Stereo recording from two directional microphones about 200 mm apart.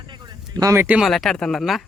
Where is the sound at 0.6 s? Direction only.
15° right (ahead or behind).